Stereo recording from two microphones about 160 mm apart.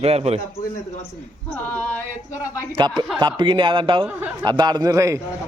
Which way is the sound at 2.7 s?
30° right (ahead or behind).